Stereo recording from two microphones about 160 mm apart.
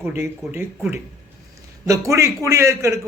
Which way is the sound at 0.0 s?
10° right (ahead or behind).